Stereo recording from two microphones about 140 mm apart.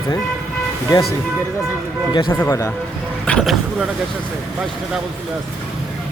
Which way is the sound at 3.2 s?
5° left (ahead or behind).